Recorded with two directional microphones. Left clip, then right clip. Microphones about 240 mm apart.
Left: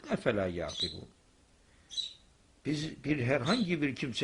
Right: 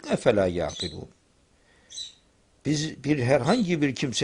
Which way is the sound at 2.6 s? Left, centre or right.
Right.